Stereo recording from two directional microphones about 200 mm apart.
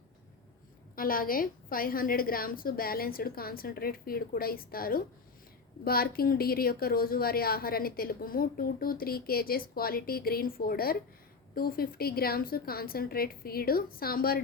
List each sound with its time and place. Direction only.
0.9 s a woman's voice: 45° left (ahead or behind)